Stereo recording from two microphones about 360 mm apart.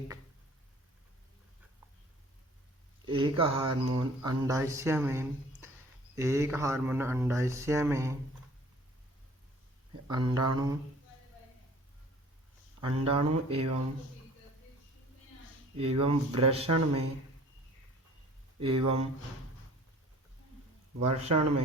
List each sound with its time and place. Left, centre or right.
3.1 s speech: centre
10.1 s speech: centre
12.8 s speech: centre
15.8 s speech: centre
18.6 s speech: centre
21.0 s speech: centre